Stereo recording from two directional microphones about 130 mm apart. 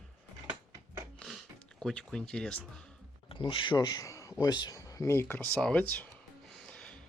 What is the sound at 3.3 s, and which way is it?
Speech, 40° left (ahead or behind).